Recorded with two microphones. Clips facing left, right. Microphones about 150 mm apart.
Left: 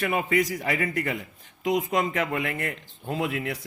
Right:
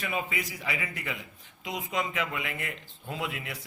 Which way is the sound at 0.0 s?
60° left (ahead or behind).